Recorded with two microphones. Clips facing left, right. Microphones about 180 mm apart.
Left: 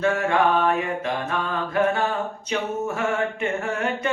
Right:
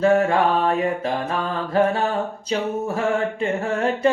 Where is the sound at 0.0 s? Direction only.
35° right (ahead or behind).